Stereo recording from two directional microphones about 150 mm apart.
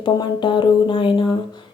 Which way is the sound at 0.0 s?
30° left (ahead or behind).